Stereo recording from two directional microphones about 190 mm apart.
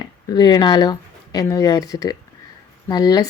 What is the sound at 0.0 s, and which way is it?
A woman's voice, 20° left (ahead or behind).